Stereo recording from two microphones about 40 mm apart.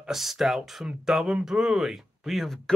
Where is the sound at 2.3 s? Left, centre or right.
Centre.